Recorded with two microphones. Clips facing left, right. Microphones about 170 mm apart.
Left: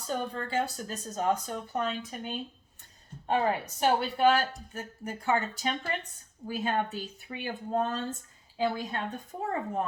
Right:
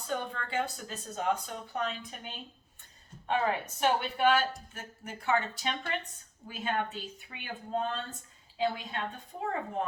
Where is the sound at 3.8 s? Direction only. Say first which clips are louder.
Left 3 dB; 35° left (ahead or behind).